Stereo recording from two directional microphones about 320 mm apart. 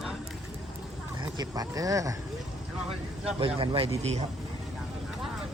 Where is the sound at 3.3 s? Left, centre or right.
Centre.